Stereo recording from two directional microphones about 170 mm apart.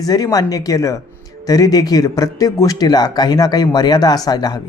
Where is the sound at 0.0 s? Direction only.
20° left (ahead or behind).